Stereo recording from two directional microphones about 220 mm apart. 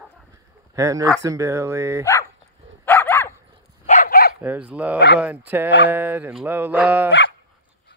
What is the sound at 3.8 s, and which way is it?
Dog, 35° left (ahead or behind).